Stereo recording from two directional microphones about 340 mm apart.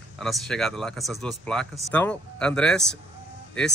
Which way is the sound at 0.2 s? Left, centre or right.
Centre.